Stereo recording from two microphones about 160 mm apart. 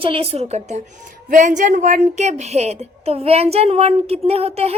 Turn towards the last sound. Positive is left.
turn(degrees=-40)  # may be behind; listen again after turning